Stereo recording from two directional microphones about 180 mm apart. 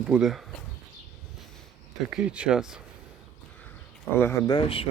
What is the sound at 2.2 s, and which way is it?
Speech, 5° right (ahead or behind).